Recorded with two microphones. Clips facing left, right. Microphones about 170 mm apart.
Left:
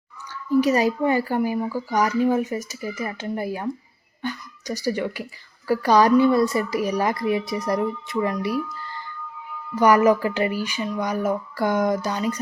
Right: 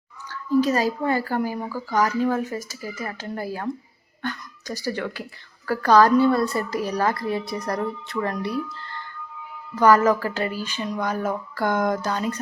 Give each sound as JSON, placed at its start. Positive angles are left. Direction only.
{"t": 0.6, "sound": "a woman's voice", "side_deg": 15}
{"t": 9.7, "sound": "a woman's voice", "side_deg": 15}